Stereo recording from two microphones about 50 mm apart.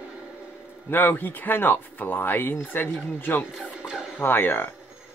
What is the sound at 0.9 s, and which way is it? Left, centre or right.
Speech, left.